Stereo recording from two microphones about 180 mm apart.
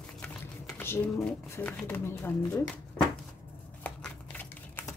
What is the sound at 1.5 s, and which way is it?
Speech, 10° left (ahead or behind).